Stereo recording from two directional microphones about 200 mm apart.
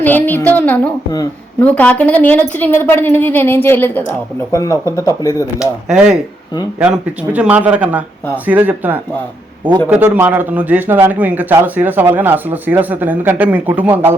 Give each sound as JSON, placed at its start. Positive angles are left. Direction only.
{"t": 0.0, "sound": "a woman's voice", "side_deg": 10}
{"t": 1.6, "sound": "a woman's voice", "side_deg": 5}
{"t": 5.5, "sound": "a man's voice", "side_deg": -5}